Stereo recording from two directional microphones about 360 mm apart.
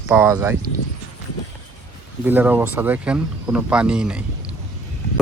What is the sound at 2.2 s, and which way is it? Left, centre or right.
Speech, centre.